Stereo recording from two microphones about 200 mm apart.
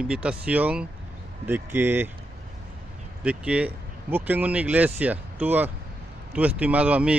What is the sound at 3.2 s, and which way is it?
Speech, 5° right (ahead or behind).